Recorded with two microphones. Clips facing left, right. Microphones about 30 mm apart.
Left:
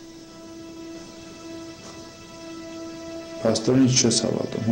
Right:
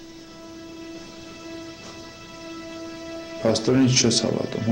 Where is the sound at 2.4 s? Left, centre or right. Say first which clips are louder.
Even; centre.